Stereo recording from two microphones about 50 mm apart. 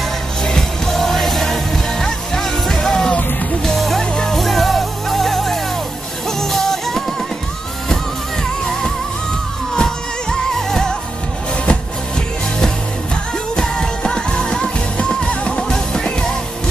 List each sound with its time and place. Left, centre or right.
0.4 s music: centre
4.0 s music: centre
4.4 s music: centre
9.8 s music: centre
13.6 s music: centre